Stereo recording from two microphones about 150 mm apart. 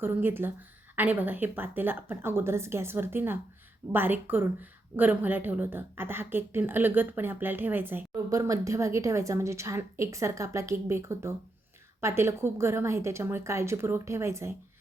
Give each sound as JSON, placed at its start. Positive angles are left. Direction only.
{"t": 0.0, "sound": "a woman's voice", "side_deg": -15}